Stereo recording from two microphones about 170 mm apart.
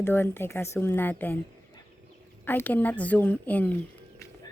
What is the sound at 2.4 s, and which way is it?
Speech, 10° left (ahead or behind).